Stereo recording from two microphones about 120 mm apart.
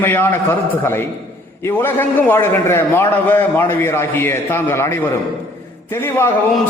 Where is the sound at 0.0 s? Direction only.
15° left (ahead or behind).